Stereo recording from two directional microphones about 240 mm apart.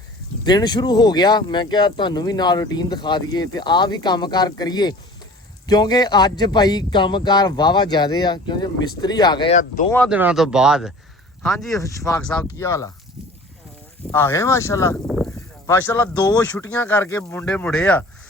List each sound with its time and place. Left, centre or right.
0.4 s speech: centre
9.6 s speech: left
10.1 s speech: centre
11.7 s speech: centre
14.1 s speech: centre
15.0 s a sound: centre
16.2 s speech: centre